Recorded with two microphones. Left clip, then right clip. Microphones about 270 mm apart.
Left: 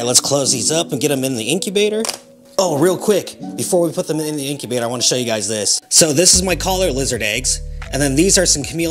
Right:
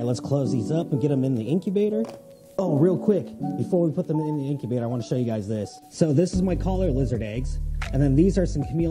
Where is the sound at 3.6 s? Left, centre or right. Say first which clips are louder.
Left 8 dB; left.